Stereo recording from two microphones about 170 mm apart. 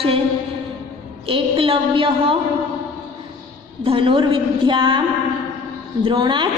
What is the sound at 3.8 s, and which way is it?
A woman's voice, 30° right (ahead or behind).